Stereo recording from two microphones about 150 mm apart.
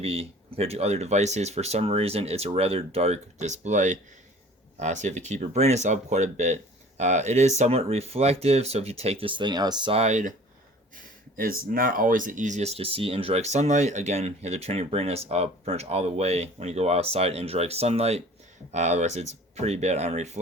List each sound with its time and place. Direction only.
0.0 s speech: 40° right (ahead or behind)
10.0 s speech: 55° right (ahead or behind)
11.6 s speech: 70° right (ahead or behind); by 20.4 s 50° right (ahead or behind)